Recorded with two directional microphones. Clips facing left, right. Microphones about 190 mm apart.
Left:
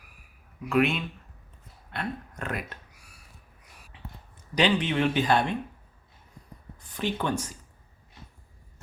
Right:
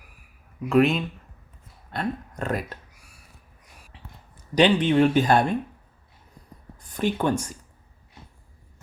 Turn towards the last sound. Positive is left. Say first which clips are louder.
# right 5 dB
turn(degrees=-45)  # may be behind; listen again after turning